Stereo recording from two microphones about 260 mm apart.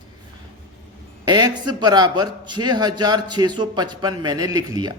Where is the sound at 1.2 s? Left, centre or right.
Centre.